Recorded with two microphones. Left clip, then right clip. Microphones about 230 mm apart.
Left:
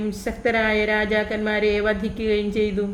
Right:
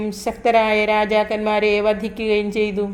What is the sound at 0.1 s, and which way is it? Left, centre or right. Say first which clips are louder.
Music: right 7 dB; centre.